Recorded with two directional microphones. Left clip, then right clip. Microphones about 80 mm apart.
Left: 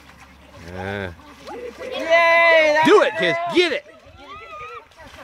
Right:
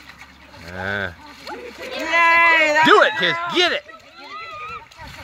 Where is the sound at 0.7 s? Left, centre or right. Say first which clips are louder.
Right 4 dB; left.